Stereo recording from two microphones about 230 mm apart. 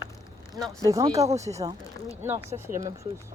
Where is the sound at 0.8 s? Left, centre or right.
Centre.